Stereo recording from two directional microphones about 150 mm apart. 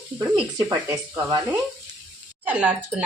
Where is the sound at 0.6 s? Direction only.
20° right (ahead or behind).